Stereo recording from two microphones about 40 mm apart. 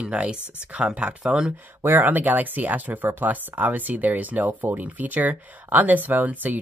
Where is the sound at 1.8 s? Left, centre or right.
Right.